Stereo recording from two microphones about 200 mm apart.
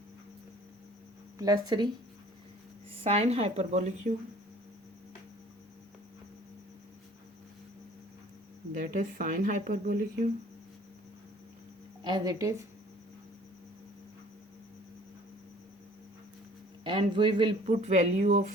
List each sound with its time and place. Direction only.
1.4 s speech: 20° right (ahead or behind)
3.0 s speech: 30° right (ahead or behind)
8.7 s speech: 40° right (ahead or behind)
12.0 s speech: 20° right (ahead or behind)
16.8 s speech: 25° right (ahead or behind)
17.7 s speech: 35° right (ahead or behind)